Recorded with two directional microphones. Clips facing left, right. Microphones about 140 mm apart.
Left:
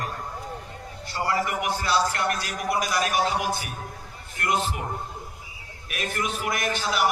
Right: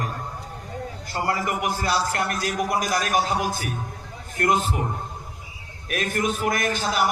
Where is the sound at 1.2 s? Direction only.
45° right (ahead or behind).